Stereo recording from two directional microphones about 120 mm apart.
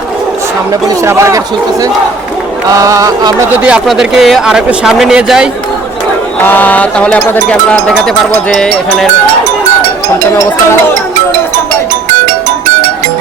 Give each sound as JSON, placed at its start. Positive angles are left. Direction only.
{"t": 0.7, "sound": "speech", "side_deg": -25}
{"t": 2.7, "sound": "speech", "side_deg": -25}
{"t": 3.6, "sound": "speech", "side_deg": -5}
{"t": 6.4, "sound": "mantra", "side_deg": 15}
{"t": 7.7, "sound": "speech", "side_deg": 5}